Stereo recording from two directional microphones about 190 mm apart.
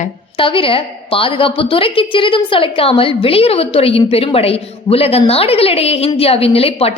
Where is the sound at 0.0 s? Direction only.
25° left (ahead or behind).